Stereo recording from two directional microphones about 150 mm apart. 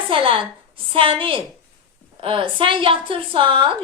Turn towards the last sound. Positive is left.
turn(degrees=-35)  # may be behind; listen again after turning